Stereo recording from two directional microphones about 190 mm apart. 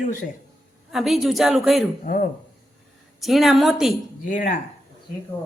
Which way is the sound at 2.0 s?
50° left (ahead or behind).